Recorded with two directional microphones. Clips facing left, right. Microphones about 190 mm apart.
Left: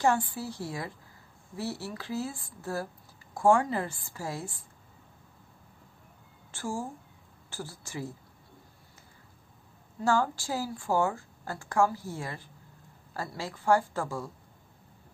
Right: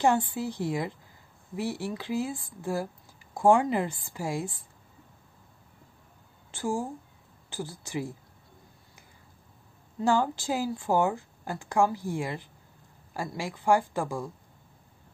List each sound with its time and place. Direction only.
0.0 s a woman's voice: 20° right (ahead or behind)
6.5 s a woman's voice: 15° right (ahead or behind)
10.0 s a woman's voice: 15° right (ahead or behind)